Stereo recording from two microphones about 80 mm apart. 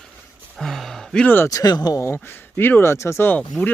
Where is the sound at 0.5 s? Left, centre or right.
Centre.